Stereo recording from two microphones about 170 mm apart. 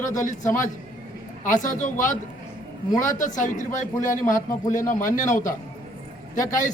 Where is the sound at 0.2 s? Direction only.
50° left (ahead or behind).